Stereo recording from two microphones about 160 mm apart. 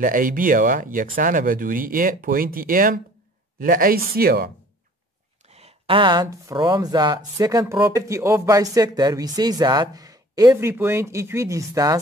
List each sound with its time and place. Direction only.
0.0 s speech: 55° right (ahead or behind)
5.5 s speech: 40° right (ahead or behind); by 12.0 s 20° right (ahead or behind)